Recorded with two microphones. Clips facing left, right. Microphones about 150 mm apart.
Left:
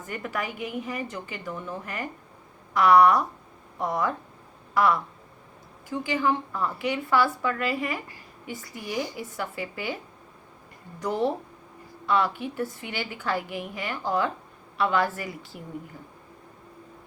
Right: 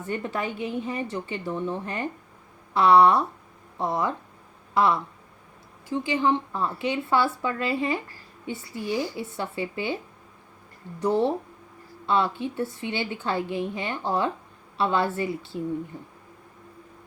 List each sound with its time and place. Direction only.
0.0 s speech: 30° right (ahead or behind)
11.0 s speech: 25° right (ahead or behind)